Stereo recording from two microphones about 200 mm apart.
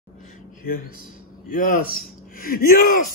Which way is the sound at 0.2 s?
45° left (ahead or behind).